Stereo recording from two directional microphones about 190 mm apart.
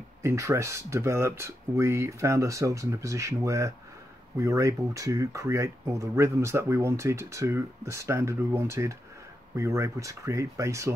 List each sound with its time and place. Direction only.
0.2 s speech: 15° right (ahead or behind)